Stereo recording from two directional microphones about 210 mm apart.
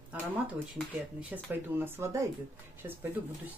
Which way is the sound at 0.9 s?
10° right (ahead or behind).